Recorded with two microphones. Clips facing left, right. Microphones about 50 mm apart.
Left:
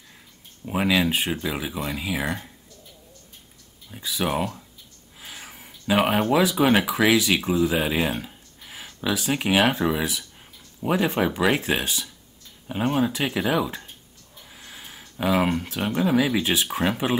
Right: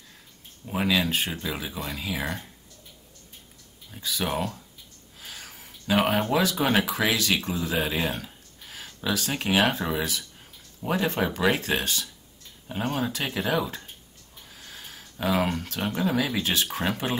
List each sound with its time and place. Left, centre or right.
0.7 s speech: centre
3.9 s speech: centre
5.2 s whispering: centre
5.7 s speech: centre
14.5 s a sound: centre
15.4 s speech: centre